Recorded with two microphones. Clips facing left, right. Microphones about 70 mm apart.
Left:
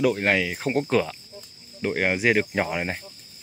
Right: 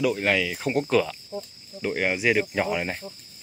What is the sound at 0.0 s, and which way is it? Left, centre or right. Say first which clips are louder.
Speech: left 2 dB; left.